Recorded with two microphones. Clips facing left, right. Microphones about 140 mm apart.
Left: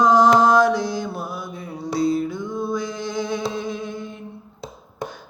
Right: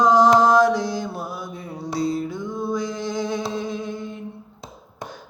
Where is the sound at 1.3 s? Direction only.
35° right (ahead or behind).